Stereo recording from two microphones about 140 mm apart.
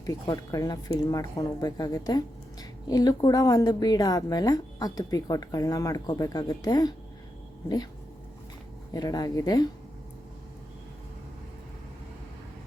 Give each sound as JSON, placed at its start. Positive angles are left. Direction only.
{"t": 0.0, "sound": "speech", "side_deg": 25}
{"t": 8.9, "sound": "speech", "side_deg": 25}